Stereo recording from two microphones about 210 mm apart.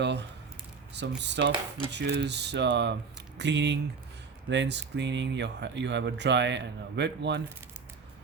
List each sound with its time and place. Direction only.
0.0 s speech: 55° right (ahead or behind)